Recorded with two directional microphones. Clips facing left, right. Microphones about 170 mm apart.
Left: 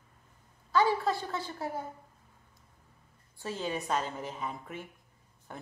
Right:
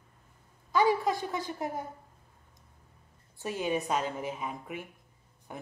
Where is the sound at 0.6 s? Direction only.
15° right (ahead or behind).